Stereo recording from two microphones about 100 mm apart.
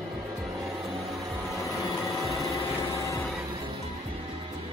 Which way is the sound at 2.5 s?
30° left (ahead or behind).